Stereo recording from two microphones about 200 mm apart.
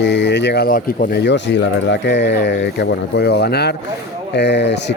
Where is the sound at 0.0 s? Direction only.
60° left (ahead or behind).